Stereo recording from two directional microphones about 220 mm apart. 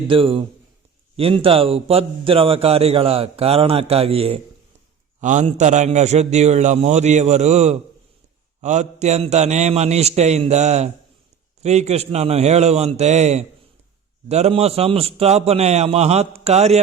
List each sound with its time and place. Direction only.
0.1 s a man's voice: 25° right (ahead or behind)